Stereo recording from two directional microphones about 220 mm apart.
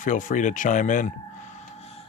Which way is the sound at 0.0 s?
35° left (ahead or behind).